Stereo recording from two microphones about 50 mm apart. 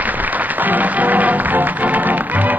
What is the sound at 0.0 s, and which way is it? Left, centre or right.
Music, right.